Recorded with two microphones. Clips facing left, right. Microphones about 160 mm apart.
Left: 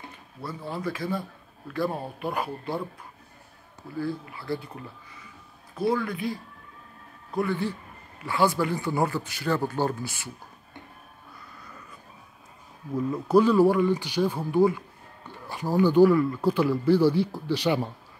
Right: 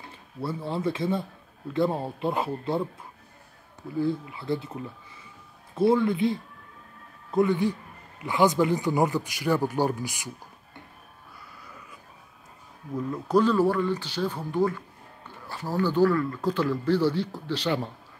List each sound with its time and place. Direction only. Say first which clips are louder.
0.4 s speech: right 4 dB; 25° right (ahead or behind)
4.0 s a man's voice: right 4 dB; 20° right (ahead or behind)
12.9 s speech: left 3 dB; 5° left (ahead or behind)